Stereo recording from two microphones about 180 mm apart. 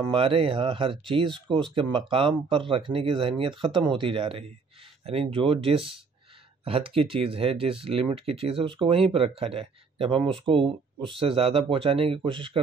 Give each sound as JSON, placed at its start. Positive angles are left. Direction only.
{"t": 0.0, "sound": "speech", "side_deg": -30}